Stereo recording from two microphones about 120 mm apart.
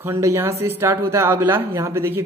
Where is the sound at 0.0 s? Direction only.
20° right (ahead or behind).